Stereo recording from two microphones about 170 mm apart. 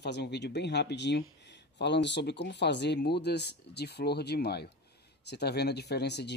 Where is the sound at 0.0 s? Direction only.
85° left.